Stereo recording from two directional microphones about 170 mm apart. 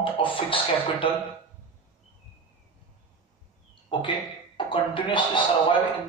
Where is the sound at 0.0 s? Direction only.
30° left (ahead or behind).